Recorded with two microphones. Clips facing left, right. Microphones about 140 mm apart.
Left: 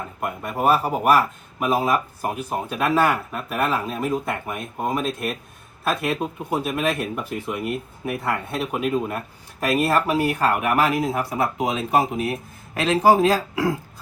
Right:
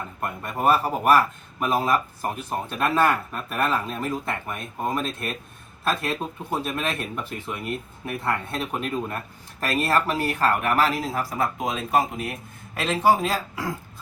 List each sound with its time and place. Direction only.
0.2 s speech: 5° left (ahead or behind)
11.6 s speech: 5° left (ahead or behind)
13.0 s speech: 35° left (ahead or behind)